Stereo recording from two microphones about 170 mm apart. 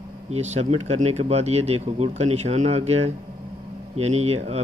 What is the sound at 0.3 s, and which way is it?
Speech, 40° right (ahead or behind).